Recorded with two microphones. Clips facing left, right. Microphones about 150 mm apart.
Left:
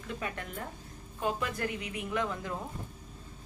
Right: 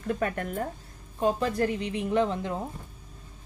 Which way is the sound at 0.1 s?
50° right (ahead or behind).